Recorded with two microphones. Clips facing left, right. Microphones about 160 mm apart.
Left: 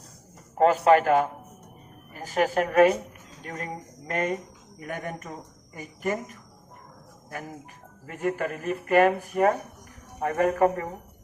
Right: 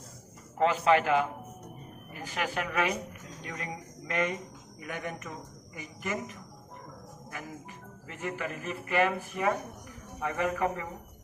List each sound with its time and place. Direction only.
0.5 s a man's voice: 45° left (ahead or behind)
8.0 s speech: 50° left (ahead or behind)